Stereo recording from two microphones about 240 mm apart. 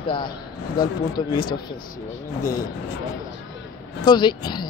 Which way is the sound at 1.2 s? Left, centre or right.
Centre.